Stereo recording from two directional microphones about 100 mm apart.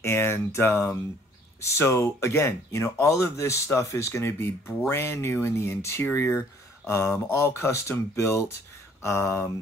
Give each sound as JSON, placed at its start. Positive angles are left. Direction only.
{"t": 0.0, "sound": "speech", "side_deg": 25}